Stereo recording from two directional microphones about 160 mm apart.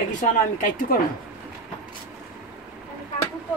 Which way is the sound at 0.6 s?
60° left (ahead or behind).